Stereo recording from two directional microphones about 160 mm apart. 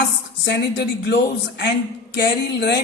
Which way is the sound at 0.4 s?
90° left.